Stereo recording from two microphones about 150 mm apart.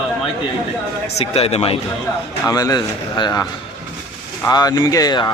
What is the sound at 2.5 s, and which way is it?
Speech, 25° left (ahead or behind).